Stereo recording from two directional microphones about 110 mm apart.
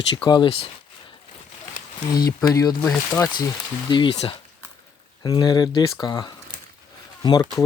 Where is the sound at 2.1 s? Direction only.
35° left (ahead or behind).